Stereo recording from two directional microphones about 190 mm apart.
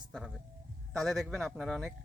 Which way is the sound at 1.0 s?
Centre (ahead or behind).